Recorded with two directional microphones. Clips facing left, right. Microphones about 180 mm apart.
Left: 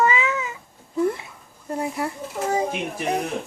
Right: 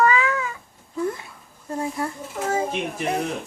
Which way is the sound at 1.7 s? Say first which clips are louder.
Left 1 dB; 20° left (ahead or behind).